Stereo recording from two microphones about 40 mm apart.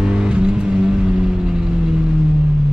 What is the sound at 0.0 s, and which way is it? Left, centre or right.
Vehicle, right.